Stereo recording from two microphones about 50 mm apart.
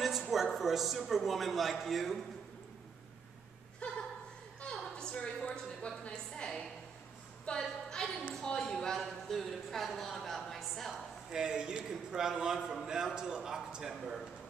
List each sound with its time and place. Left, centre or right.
0.0 s a woman's voice: centre
3.8 s a sound: left
4.6 s a woman's voice: centre
11.3 s speech: centre